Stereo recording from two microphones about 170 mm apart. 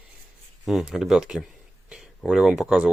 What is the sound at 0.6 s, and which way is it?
Speech, 5° right (ahead or behind).